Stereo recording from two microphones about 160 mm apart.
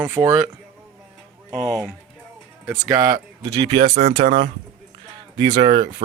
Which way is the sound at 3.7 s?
35° right (ahead or behind).